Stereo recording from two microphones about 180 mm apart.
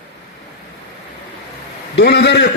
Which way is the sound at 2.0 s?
70° left (ahead or behind).